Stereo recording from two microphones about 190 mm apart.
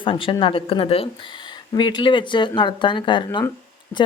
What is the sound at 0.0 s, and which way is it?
Speech, 25° left (ahead or behind).